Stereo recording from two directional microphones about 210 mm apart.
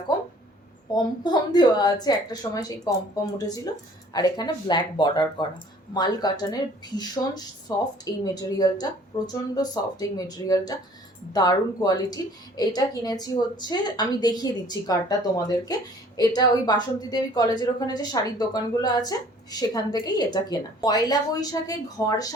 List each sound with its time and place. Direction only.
1.2 s a woman's voice: 20° left (ahead or behind)